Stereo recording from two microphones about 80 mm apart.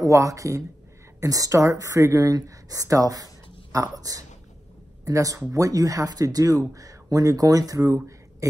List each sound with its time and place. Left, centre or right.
0.0 s a woman's voice: right